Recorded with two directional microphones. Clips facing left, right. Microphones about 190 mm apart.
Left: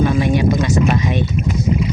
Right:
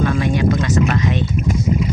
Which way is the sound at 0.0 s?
15° left (ahead or behind).